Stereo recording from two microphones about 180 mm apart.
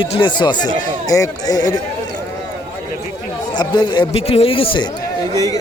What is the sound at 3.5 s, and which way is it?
Speech, 25° left (ahead or behind).